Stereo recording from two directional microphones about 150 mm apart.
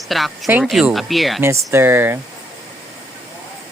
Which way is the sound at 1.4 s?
20° right (ahead or behind).